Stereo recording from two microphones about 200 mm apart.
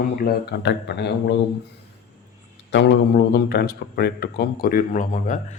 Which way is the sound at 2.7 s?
55° left (ahead or behind).